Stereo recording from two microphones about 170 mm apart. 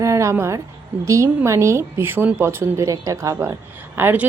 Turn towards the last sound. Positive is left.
turn(degrees=-10)  # may be behind; listen again after turning